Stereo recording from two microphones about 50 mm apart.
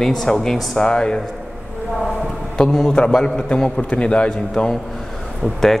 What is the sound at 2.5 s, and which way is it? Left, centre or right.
A man's voice, centre.